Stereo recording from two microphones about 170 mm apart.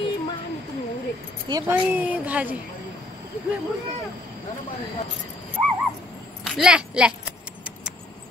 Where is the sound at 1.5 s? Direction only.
15° right (ahead or behind).